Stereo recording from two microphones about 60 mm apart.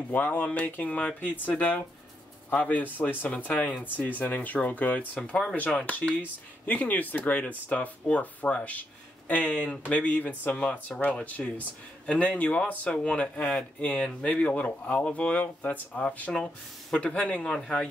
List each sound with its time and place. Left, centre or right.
0.1 s speech: left
1.2 s speech: left
5.9 s speech: left
17.5 s speech: centre